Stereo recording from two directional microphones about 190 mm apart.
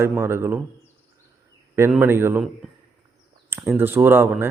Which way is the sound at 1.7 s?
10° right (ahead or behind).